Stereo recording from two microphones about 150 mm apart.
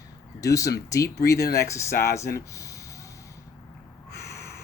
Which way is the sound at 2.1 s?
20° left (ahead or behind).